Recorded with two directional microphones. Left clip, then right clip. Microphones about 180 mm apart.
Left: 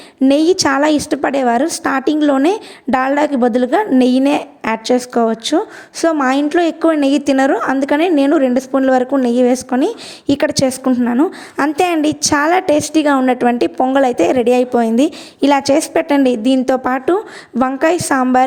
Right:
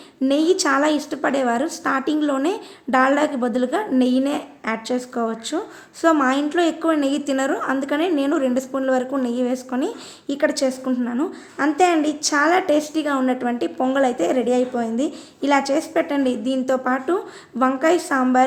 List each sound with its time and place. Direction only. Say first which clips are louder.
0.3 s a woman's voice: left 6 dB; 40° left (ahead or behind)